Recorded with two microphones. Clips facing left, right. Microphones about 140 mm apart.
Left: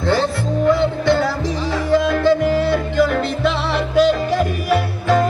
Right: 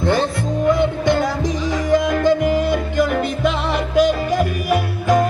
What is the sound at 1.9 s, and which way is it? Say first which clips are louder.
Music: left 1 dB; 15° right (ahead or behind).